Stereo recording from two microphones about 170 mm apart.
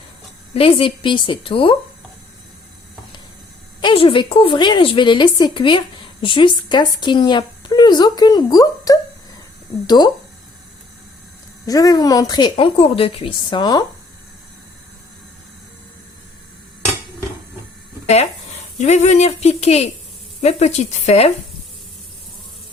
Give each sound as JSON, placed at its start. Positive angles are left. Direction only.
{"t": 0.5, "sound": "a woman's voice", "side_deg": 35}
{"t": 3.8, "sound": "a woman's voice", "side_deg": 30}
{"t": 11.6, "sound": "a woman's voice", "side_deg": 20}
{"t": 18.8, "sound": "a woman's voice", "side_deg": 45}